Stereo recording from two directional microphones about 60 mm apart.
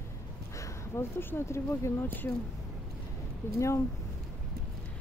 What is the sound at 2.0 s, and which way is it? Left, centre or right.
Speech, left.